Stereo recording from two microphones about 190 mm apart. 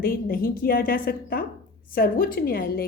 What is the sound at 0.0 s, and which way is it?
A woman's voice, 50° left (ahead or behind).